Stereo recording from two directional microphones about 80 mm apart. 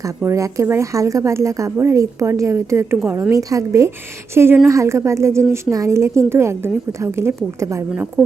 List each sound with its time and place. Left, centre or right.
0.3 s a woman's voice: right
3.3 s a woman's voice: right